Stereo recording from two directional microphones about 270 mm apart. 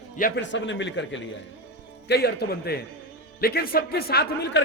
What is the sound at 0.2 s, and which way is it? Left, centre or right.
A man's voice, left.